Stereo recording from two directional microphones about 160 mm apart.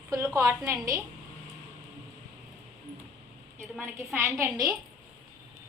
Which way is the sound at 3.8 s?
15° right (ahead or behind).